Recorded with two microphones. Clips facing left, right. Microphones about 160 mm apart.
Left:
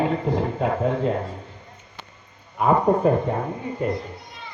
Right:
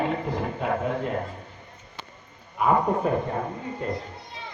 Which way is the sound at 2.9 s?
40° left (ahead or behind).